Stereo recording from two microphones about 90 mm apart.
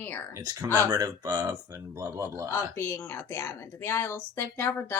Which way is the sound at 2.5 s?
25° left (ahead or behind).